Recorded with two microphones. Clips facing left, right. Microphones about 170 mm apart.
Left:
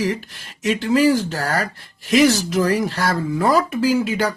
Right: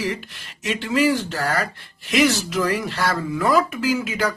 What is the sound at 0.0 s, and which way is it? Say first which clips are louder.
Speech: left 4 dB; 40° left (ahead or behind).